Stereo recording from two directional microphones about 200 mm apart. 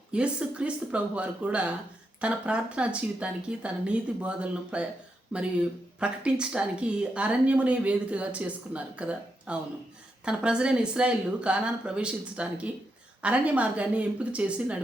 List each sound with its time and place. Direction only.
0.1 s speech: 5° right (ahead or behind)